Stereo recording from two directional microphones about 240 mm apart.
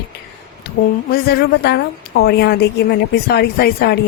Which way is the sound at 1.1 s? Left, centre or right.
Left.